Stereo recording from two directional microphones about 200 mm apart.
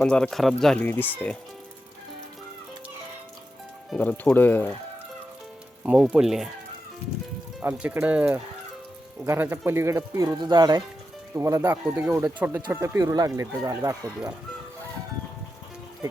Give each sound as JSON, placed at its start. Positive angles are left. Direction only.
{"t": 0.0, "sound": "speech", "side_deg": 5}
{"t": 3.8, "sound": "speech", "side_deg": 5}
{"t": 5.8, "sound": "speech", "side_deg": -5}
{"t": 7.6, "sound": "speech", "side_deg": -10}